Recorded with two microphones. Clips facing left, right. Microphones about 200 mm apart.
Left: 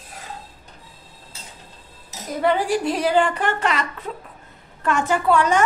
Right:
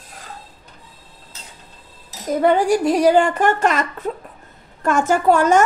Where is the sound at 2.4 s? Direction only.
45° right (ahead or behind).